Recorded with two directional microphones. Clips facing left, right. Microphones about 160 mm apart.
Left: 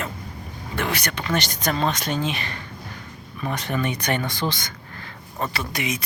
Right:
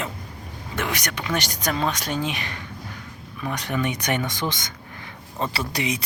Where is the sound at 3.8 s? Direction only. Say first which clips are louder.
Right 1 dB; 15° right (ahead or behind).